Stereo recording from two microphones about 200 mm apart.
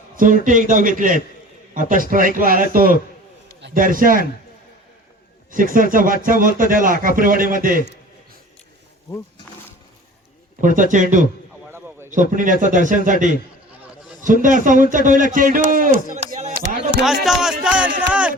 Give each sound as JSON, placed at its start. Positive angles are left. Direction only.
{"t": 0.2, "sound": "a man's voice", "side_deg": -40}
{"t": 5.5, "sound": "a man's voice", "side_deg": -45}
{"t": 10.6, "sound": "a man's voice", "side_deg": -40}
{"t": 11.7, "sound": "a sound", "side_deg": -10}
{"t": 12.1, "sound": "a man's voice", "side_deg": -40}
{"t": 14.4, "sound": "a man's voice", "side_deg": -40}
{"t": 17.2, "sound": "speech", "side_deg": 0}